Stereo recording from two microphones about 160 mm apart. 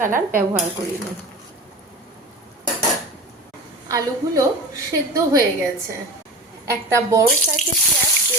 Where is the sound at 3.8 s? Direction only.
20° right (ahead or behind).